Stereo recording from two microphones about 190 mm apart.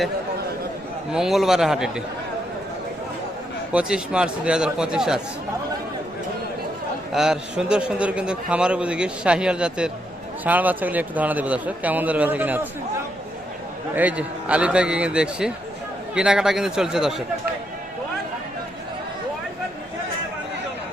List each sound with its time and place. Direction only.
1.1 s a man's voice: centre (ahead or behind)
3.7 s a man's voice: 5° right (ahead or behind)
7.1 s a man's voice: 5° right (ahead or behind)
13.9 s a man's voice: 10° right (ahead or behind)